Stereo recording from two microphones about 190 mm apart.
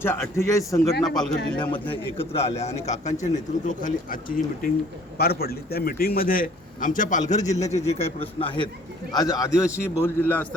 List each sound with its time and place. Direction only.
0.0 s a man's voice: 15° left (ahead or behind)
1.0 s speech: centre (ahead or behind)
2.1 s a man's voice: 30° left (ahead or behind); by 10.4 s 10° left (ahead or behind)